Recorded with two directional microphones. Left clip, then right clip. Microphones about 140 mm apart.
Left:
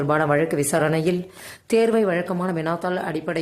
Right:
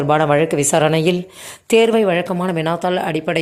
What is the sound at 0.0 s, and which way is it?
A woman's voice, 15° right (ahead or behind).